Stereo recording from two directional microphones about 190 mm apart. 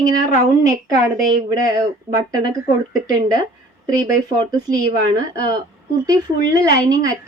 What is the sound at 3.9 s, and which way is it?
A woman's voice, 20° right (ahead or behind).